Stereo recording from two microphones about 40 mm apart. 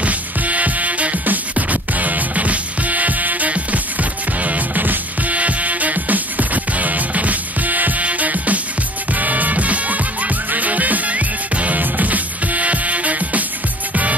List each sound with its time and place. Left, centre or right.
0.0 s music: right